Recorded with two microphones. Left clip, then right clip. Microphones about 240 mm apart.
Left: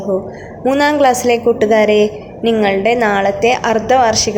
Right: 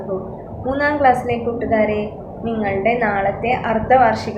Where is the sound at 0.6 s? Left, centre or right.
Left.